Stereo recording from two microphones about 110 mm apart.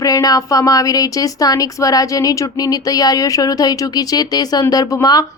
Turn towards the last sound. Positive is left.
turn(degrees=35)  # may be behind; listen again after turning